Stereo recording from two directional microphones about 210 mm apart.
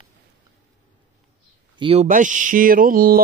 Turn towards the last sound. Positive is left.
turn(degrees=-45)  # may be behind; listen again after turning